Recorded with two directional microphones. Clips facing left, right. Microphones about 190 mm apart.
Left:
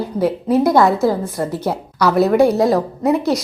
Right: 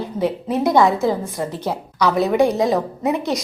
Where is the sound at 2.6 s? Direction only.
Centre (ahead or behind).